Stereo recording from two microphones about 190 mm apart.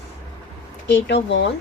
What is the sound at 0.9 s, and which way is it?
Speech, 70° left (ahead or behind).